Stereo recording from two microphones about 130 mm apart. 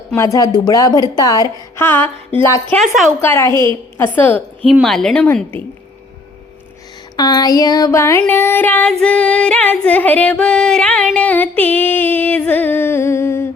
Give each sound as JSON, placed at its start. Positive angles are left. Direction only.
{"t": 0.2, "sound": "a woman's voice", "side_deg": 25}
{"t": 1.7, "sound": "female singing", "side_deg": 15}
{"t": 2.7, "sound": "a woman's voice", "side_deg": 0}
{"t": 3.2, "sound": "female singing", "side_deg": 20}
{"t": 4.7, "sound": "a woman's voice", "side_deg": 0}
{"t": 7.2, "sound": "a woman's voice", "side_deg": 30}
{"t": 8.3, "sound": "female singing", "side_deg": 15}